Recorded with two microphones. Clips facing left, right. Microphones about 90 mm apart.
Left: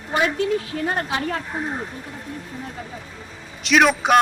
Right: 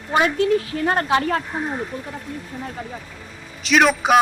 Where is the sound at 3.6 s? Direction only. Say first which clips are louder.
Even; centre (ahead or behind).